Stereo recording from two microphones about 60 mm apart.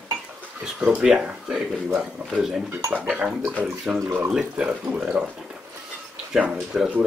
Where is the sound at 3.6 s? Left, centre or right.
Centre.